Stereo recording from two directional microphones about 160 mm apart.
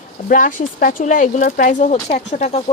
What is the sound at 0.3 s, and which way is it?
Speech, 55° left (ahead or behind).